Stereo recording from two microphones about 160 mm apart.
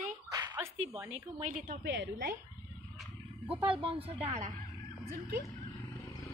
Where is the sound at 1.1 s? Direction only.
50° right (ahead or behind).